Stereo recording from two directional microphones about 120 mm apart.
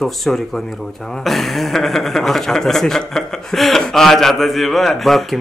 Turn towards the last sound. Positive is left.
turn(degrees=0)  # may be behind; listen again after turning